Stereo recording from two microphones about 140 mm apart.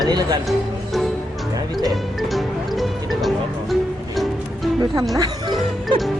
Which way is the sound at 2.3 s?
Centre (ahead or behind).